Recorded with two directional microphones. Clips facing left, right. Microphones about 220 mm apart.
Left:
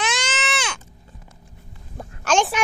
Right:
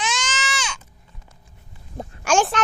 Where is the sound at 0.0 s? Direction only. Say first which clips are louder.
Left 2 dB; 60° left (ahead or behind).